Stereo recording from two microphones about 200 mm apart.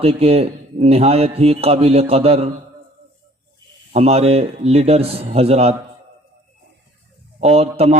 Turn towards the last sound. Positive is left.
turn(degrees=-30)  # may be behind; listen again after turning